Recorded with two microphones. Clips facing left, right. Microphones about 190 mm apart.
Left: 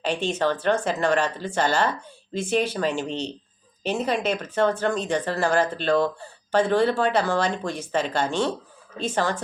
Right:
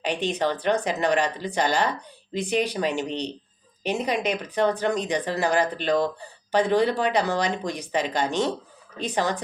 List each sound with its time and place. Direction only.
0.0 s speech: 15° right (ahead or behind)